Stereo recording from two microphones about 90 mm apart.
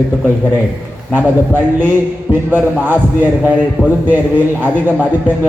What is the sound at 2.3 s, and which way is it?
Speech, 20° right (ahead or behind).